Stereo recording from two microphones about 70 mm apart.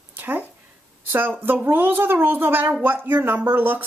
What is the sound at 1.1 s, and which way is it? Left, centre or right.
A woman's voice, right.